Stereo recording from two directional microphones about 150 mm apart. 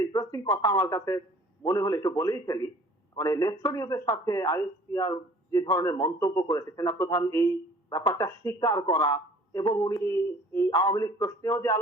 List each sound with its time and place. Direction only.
0.0 s speech: 25° left (ahead or behind)